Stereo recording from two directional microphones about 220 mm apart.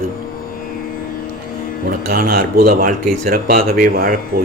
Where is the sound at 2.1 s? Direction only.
40° right (ahead or behind).